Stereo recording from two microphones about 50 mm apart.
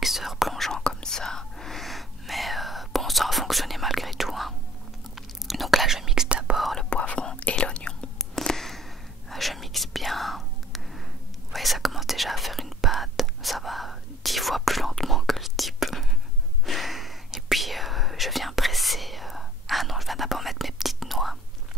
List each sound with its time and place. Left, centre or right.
0.0 s whispering: centre
6.2 s whispering: right
6.5 s whispering: centre
6.9 s whispering: left
8.2 s a sound: centre
9.3 s whispering: centre